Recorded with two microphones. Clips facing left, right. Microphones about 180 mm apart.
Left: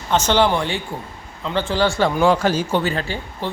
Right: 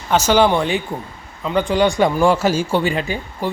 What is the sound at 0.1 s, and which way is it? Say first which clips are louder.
Speech: right 3 dB; 10° right (ahead or behind).